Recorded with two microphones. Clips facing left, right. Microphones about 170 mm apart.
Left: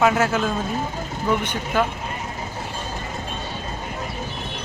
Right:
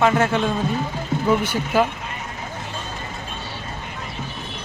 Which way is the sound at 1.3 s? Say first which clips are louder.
Right 2 dB; 10° right (ahead or behind).